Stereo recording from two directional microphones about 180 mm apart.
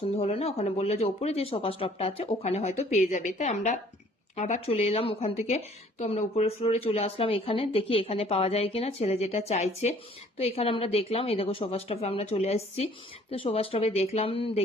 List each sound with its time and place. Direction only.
0.2 s speech: 35° left (ahead or behind)